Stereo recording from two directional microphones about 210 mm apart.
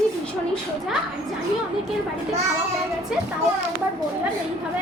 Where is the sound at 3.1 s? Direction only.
5° right (ahead or behind).